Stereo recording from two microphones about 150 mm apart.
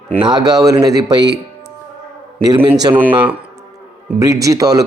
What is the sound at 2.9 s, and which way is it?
Speech, 10° right (ahead or behind).